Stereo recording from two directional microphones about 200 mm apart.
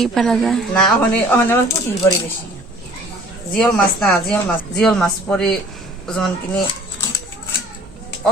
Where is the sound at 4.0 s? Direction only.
Centre (ahead or behind).